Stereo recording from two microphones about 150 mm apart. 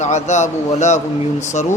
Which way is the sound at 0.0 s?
50° left (ahead or behind).